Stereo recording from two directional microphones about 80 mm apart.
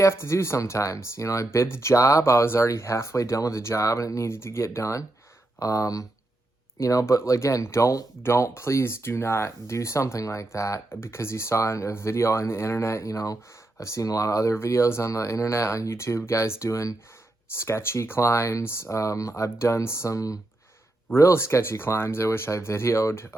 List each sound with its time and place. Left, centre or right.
0.0 s speech: left
21.2 s speech: left